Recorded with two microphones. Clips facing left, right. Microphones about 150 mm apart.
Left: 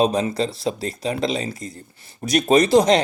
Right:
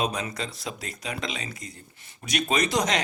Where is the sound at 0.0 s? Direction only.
30° left (ahead or behind).